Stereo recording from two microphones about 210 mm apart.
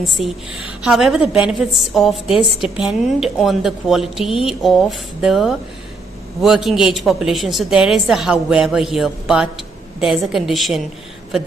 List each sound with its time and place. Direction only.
0.0 s a woman's voice: centre (ahead or behind)